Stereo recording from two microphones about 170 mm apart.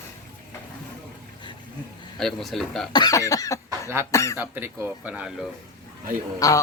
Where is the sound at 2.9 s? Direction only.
20° left (ahead or behind).